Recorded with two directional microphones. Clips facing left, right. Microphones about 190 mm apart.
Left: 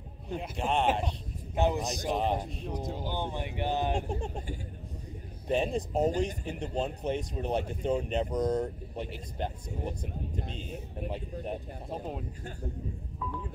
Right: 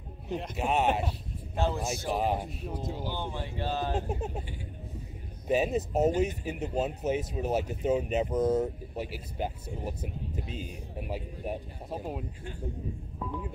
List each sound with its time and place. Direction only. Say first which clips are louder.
0.3 s speech: right 1 dB; 5° right (ahead or behind)
1.6 s speech: left 2 dB; 15° left (ahead or behind)
2.0 s speech: even; 5° right (ahead or behind)
3.0 s speech: left 1 dB; 15° left (ahead or behind)
4.1 s speech: right 1 dB; 5° right (ahead or behind)
5.5 s speech: right 2 dB; 5° right (ahead or behind)